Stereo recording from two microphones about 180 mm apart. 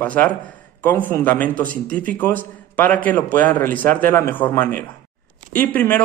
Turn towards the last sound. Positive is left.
turn(degrees=10)  # may be behind; listen again after turning